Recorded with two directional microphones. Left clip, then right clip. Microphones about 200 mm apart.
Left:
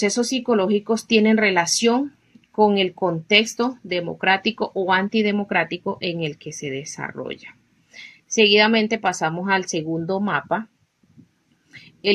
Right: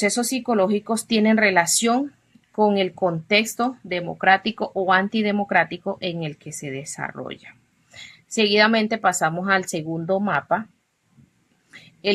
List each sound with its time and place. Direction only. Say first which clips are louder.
0.0 s speech: left 1 dB; 20° right (ahead or behind)